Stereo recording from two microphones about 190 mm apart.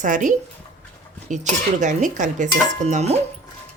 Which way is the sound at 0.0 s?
45° right (ahead or behind).